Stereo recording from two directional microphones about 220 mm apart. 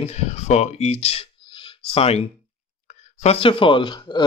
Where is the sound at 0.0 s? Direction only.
30° left (ahead or behind).